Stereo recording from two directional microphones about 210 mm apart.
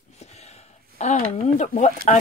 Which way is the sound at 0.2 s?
30° left (ahead or behind).